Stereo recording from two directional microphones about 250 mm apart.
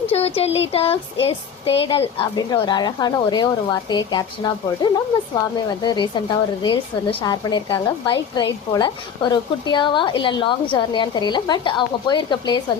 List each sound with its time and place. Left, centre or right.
0.3 s music: left
1.8 s a woman's voice: left